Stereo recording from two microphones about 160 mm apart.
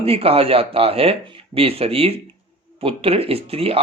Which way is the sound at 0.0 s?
35° right (ahead or behind).